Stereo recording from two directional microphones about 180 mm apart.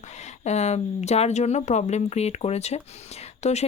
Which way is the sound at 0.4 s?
40° left (ahead or behind).